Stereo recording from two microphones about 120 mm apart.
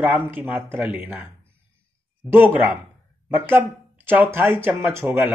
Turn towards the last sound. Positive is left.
turn(degrees=-20)  # may be behind; listen again after turning